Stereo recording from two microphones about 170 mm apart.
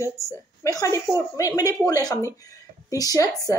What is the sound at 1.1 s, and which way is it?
Speech, 20° left (ahead or behind).